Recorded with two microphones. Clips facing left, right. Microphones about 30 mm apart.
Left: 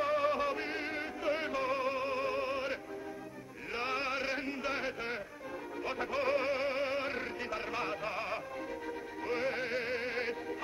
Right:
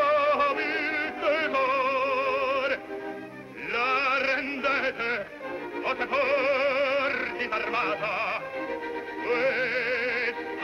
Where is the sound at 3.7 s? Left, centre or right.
Right.